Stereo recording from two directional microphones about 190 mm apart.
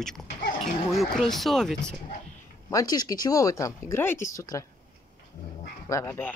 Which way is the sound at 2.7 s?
20° left (ahead or behind).